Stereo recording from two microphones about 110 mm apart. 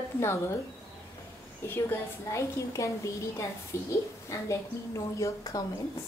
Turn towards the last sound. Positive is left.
turn(degrees=30)  # may be behind; listen again after turning